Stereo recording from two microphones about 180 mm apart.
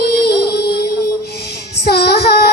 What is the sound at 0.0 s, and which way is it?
Music, 60° left (ahead or behind).